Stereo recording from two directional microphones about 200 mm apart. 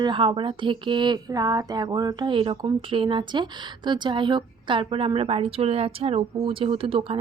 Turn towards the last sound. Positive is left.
turn(degrees=-25)  # may be behind; listen again after turning